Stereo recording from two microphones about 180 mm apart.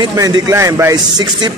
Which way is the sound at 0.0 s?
20° right (ahead or behind).